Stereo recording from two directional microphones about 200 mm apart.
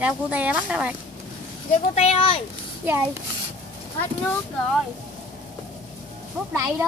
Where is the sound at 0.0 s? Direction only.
5° right (ahead or behind).